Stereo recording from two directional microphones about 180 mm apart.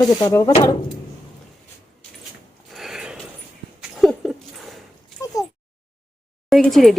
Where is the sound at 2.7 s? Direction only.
Centre (ahead or behind).